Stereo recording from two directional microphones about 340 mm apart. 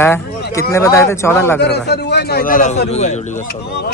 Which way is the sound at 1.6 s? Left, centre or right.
Left.